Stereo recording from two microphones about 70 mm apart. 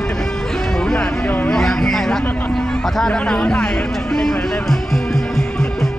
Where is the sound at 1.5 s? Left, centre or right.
Centre.